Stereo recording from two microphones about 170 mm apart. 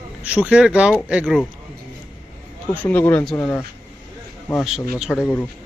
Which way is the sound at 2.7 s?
10° left (ahead or behind).